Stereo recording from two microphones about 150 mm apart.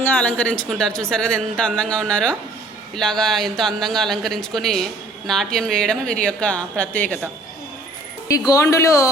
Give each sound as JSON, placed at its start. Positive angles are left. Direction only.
{"t": 0.0, "sound": "a woman's voice", "side_deg": 10}
{"t": 8.3, "sound": "speech", "side_deg": 20}